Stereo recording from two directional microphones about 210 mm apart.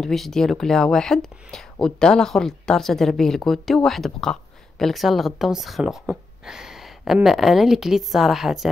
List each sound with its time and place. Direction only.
0.0 s a woman's voice: centre (ahead or behind)